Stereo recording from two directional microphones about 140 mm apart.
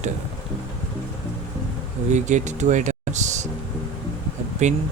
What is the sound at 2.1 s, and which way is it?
Speech, 60° right (ahead or behind).